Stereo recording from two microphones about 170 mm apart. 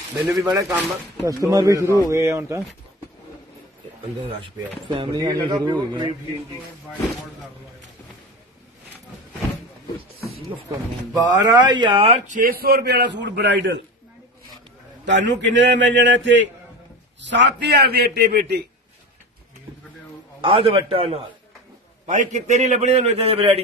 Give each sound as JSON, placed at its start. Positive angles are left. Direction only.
{"t": 0.4, "sound": "speech", "side_deg": -20}
{"t": 4.4, "sound": "speech", "side_deg": -30}
{"t": 11.2, "sound": "speech", "side_deg": -25}
{"t": 12.4, "sound": "a man's voice", "side_deg": -60}
{"t": 15.0, "sound": "a man's voice", "side_deg": -90}
{"t": 20.4, "sound": "a man's voice", "side_deg": -30}
{"t": 22.0, "sound": "a man's voice", "side_deg": -45}